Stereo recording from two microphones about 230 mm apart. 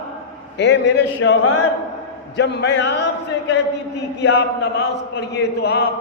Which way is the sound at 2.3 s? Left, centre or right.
Left.